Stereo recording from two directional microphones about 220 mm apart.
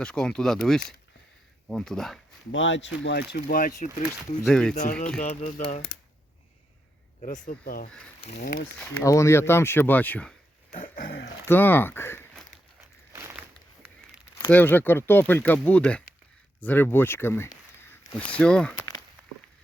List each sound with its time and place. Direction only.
0.0 s speech: 5° left (ahead or behind)
2.5 s speech: 55° left (ahead or behind)
3.3 s speech: 45° left (ahead or behind)
4.2 s speech: centre (ahead or behind)
4.7 s speech: 35° left (ahead or behind)
4.9 s speech: 5° left (ahead or behind)
5.2 s speech: 35° left (ahead or behind)
7.2 s speech: 35° left (ahead or behind)
8.8 s speech: 15° left (ahead or behind)
10.7 s dog: 40° left (ahead or behind)
11.4 s speech: 10° left (ahead or behind)
13.1 s a sound: 10° right (ahead or behind)
14.3 s speech: 10° left (ahead or behind)